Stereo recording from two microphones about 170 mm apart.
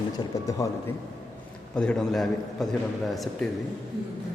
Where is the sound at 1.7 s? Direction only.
5° left (ahead or behind).